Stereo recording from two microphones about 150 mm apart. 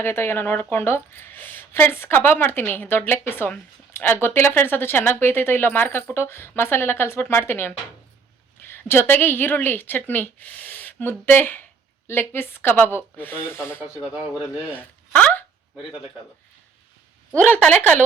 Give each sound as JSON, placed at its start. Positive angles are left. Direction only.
{"t": 0.0, "sound": "speech", "side_deg": 15}
{"t": 14.1, "sound": "a man's voice", "side_deg": -10}
{"t": 14.8, "sound": "a sound", "side_deg": 10}
{"t": 17.3, "sound": "speech", "side_deg": 10}